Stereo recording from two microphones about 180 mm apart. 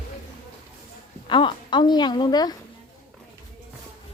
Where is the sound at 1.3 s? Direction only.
25° left (ahead or behind).